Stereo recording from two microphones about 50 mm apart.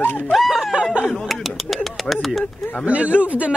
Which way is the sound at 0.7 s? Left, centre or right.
Centre.